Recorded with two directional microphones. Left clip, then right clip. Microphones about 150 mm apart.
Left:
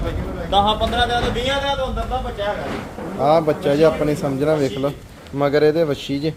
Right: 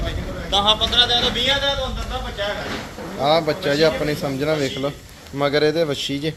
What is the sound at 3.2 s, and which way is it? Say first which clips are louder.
A man's voice: left 2 dB; 25° left (ahead or behind).